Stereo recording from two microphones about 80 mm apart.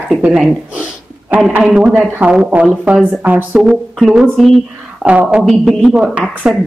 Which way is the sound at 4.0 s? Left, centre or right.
Centre.